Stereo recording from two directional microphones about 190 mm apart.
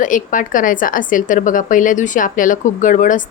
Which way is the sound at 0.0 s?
45° left (ahead or behind).